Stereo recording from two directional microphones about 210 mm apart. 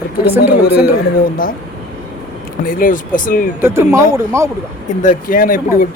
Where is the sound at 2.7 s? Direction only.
40° left (ahead or behind).